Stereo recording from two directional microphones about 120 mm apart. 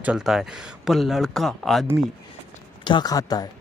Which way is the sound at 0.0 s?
5° right (ahead or behind).